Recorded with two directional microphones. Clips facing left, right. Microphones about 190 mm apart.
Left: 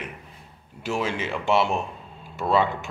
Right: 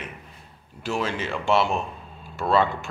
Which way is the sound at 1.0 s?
15° left (ahead or behind).